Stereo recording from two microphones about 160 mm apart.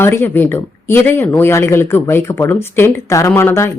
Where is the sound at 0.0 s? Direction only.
15° left (ahead or behind).